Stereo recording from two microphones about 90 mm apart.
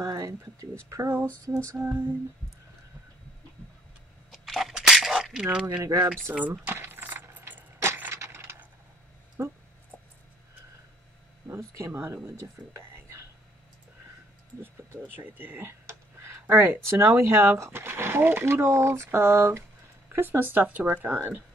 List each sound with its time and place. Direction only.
0.0 s speech: 40° right (ahead or behind)
1.8 s speech: 20° right (ahead or behind)
4.3 s a sound: centre (ahead or behind)
5.4 s speech: 15° right (ahead or behind)
6.6 s a sound: 25° right (ahead or behind)
9.4 s speech: 40° right (ahead or behind)
11.4 s speech: 30° right (ahead or behind)
12.7 s whispering: 30° right (ahead or behind)
14.6 s speech: 20° right (ahead or behind)